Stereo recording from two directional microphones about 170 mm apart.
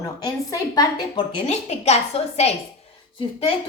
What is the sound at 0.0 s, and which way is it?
A woman's voice, 20° left (ahead or behind).